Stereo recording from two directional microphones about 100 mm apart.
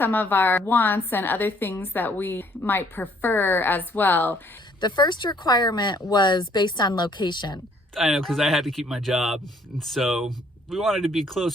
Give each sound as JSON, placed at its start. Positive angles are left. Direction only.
{"t": 0.0, "sound": "a woman's voice", "side_deg": 20}
{"t": 4.8, "sound": "speech", "side_deg": 50}
{"t": 7.9, "sound": "speech", "side_deg": 0}